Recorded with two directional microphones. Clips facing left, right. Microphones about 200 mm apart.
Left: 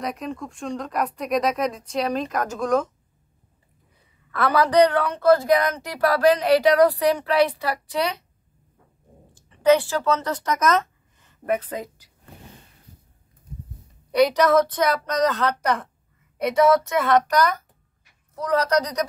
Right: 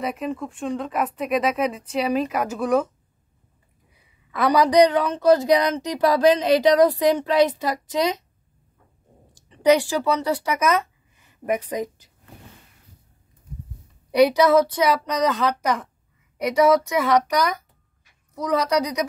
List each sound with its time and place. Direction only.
0.0 s speech: 5° right (ahead or behind)
3.9 s a woman's voice: 15° right (ahead or behind)
9.3 s speech: 15° right (ahead or behind)
14.1 s a woman's voice: 10° right (ahead or behind)
18.3 s a woman's voice: 10° right (ahead or behind)